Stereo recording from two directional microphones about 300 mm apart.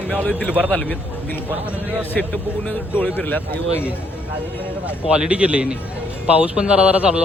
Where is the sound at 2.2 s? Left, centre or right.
Centre.